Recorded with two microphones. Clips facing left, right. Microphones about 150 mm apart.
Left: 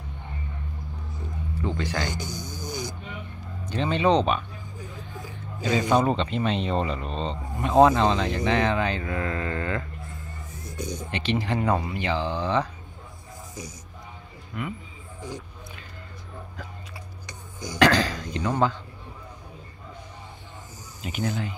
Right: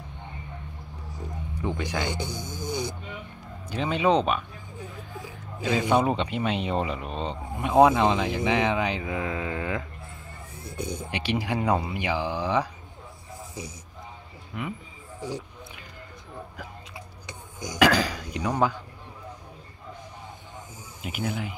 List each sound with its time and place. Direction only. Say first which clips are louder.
1.6 s speech: even; 15° right (ahead or behind)
2.4 s snoring: right 3 dB; 25° right (ahead or behind)
3.6 s speech: left 1 dB; 5° right (ahead or behind)
5.6 s speech: left 1 dB; 5° right (ahead or behind)
10.6 s a sound: even; 30° right (ahead or behind)
11.1 s speech: left 2 dB; 10° right (ahead or behind)
14.5 s speech: left 1 dB; 15° right (ahead or behind)
15.1 s speech: right 3 dB; 35° right (ahead or behind)
17.6 s speech: left 1 dB; 15° right (ahead or behind)
21.0 s speech: left 2 dB; 5° right (ahead or behind)